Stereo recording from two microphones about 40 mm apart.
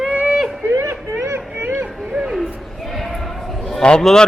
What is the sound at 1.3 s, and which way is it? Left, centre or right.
Children playing, right.